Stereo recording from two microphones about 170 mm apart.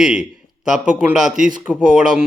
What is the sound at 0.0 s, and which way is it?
Speech, 5° right (ahead or behind).